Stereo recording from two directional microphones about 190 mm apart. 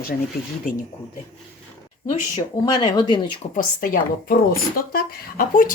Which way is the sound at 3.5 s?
50° left (ahead or behind).